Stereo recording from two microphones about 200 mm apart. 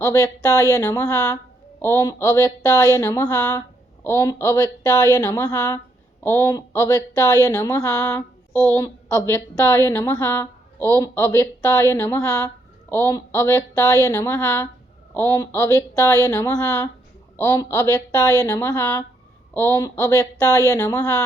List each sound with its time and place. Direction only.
0.0 s a woman's voice: 15° left (ahead or behind)